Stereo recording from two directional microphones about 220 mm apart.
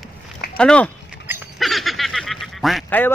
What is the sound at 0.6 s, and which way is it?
Speech, 5° left (ahead or behind).